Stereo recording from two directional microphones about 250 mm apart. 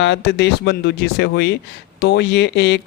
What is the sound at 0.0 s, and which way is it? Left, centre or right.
Speech, left.